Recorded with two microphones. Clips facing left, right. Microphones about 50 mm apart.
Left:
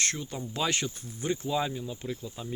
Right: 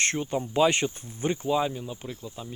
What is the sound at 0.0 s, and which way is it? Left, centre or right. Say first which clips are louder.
Speech: right 6 dB; right.